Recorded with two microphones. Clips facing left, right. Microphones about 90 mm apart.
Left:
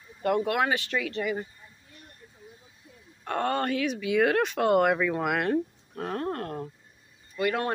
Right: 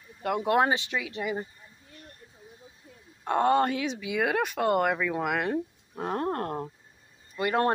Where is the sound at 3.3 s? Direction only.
20° right (ahead or behind).